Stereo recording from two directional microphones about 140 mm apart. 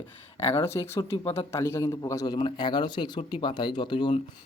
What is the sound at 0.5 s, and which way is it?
A man's voice, 20° left (ahead or behind).